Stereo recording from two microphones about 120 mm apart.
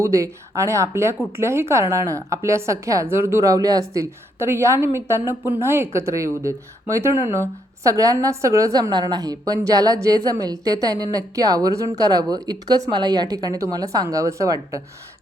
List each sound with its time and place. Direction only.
0.0 s a woman's voice: 25° right (ahead or behind)